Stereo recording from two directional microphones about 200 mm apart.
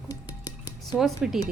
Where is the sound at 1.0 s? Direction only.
Centre (ahead or behind).